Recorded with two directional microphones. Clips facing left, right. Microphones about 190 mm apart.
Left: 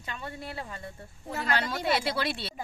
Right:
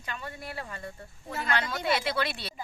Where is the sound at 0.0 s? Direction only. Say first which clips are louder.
Left 1 dB; 25° left (ahead or behind).